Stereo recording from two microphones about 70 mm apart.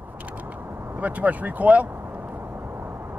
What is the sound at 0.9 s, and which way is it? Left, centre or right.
Speech, right.